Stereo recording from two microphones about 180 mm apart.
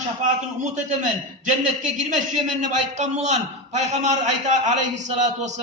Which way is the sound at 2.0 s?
45° right (ahead or behind).